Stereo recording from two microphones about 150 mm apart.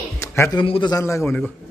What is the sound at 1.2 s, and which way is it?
Speech, centre (ahead or behind).